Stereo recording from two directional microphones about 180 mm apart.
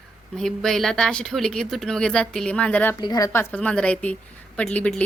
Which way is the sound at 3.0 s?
20° left (ahead or behind).